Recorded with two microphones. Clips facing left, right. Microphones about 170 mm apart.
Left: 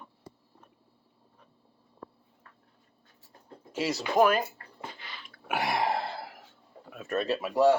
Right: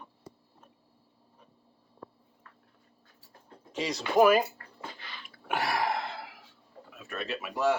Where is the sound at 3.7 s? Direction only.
5° left (ahead or behind).